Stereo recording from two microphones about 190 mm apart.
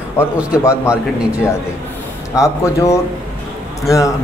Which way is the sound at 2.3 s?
15° left (ahead or behind).